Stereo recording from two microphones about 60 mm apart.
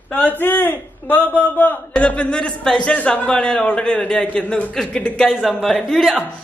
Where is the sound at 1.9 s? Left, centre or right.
Centre.